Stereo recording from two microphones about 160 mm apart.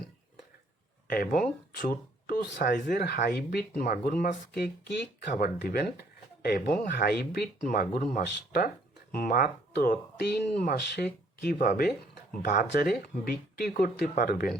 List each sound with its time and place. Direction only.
1.0 s speech: 70° left (ahead or behind)
3.0 s speech: 75° left (ahead or behind); by 4.4 s 55° left (ahead or behind)
4.5 s speech: 90° left
5.3 s speech: 65° left (ahead or behind)
6.7 s speech: 60° left (ahead or behind); by 7.4 s 80° left
7.9 s speech: 50° left (ahead or behind)
12.9 s speech: 80° left
13.7 s speech: 65° left (ahead or behind)